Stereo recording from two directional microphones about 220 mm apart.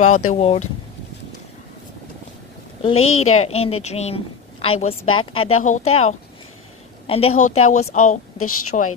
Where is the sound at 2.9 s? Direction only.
70° left (ahead or behind).